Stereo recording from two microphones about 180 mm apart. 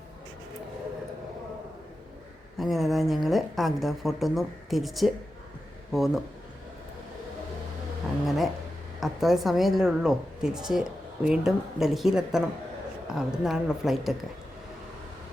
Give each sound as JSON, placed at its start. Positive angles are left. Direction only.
{"t": 2.6, "sound": "a woman's voice", "side_deg": 0}
{"t": 8.1, "sound": "a sound", "side_deg": 0}
{"t": 9.0, "sound": "a woman's voice", "side_deg": 0}